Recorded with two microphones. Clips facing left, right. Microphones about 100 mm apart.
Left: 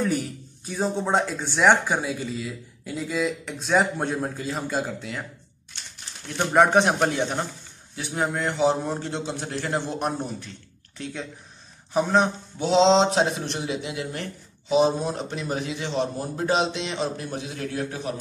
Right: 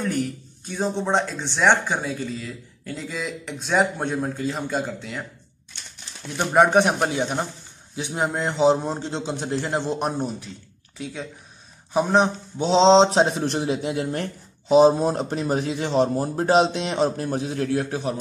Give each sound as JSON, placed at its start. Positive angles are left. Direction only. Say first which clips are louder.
{"t": 0.0, "sound": "speech", "louder": "even", "side_deg": 5}
{"t": 6.3, "sound": "a man's voice", "louder": "right 1 dB", "side_deg": 0}
{"t": 11.0, "sound": "a man's voice", "louder": "right 1 dB", "side_deg": -5}
{"t": 12.2, "sound": "speech", "louder": "right 2 dB", "side_deg": -25}